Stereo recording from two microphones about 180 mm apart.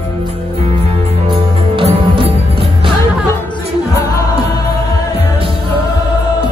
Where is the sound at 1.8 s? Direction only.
30° right (ahead or behind).